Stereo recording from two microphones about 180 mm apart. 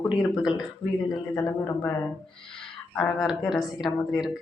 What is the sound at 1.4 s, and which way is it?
Speech, 20° left (ahead or behind).